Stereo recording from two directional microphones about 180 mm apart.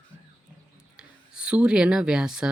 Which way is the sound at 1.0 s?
5° right (ahead or behind).